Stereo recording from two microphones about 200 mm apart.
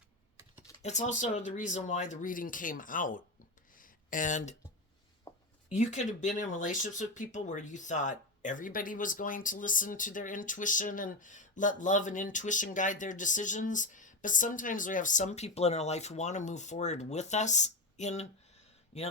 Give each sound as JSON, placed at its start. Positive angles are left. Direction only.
{"t": 0.8, "sound": "speech", "side_deg": 35}
{"t": 3.8, "sound": "a sound", "side_deg": 40}
{"t": 5.3, "sound": "writing", "side_deg": 15}
{"t": 5.7, "sound": "speech", "side_deg": 35}